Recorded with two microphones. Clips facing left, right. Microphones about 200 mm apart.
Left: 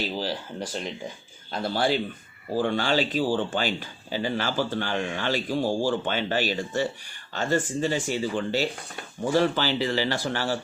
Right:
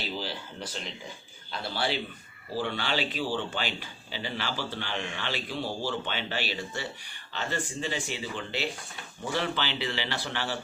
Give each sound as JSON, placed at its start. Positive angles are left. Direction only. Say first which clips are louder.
{"t": 0.2, "sound": "speech", "louder": "left 6 dB", "side_deg": 40}